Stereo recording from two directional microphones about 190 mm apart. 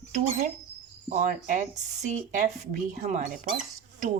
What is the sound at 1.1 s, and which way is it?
Speech, 45° right (ahead or behind).